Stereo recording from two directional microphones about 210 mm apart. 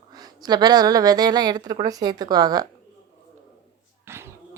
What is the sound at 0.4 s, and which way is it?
A woman's voice, 20° right (ahead or behind).